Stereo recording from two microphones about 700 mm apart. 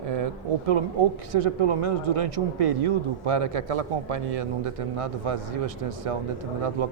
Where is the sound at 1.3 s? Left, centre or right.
Right.